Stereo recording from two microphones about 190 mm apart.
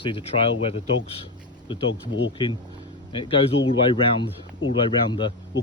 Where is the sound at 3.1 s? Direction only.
30° left (ahead or behind).